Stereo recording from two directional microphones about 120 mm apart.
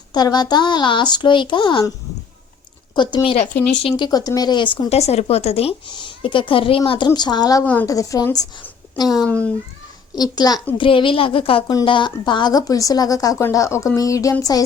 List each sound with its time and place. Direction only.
0.1 s speech: 35° left (ahead or behind)
2.9 s a woman's voice: 40° left (ahead or behind)
4.9 s speech: 60° left (ahead or behind)
5.9 s speech: 40° left (ahead or behind)
7.1 s speech: 35° left (ahead or behind)
7.6 s a woman's voice: 15° left (ahead or behind)
7.9 s speech: 30° left (ahead or behind)
9.2 s a woman's voice: 10° left (ahead or behind)
10.2 s speech: 35° left (ahead or behind)
10.8 s speech: 45° left (ahead or behind); by 14.3 s 25° left (ahead or behind)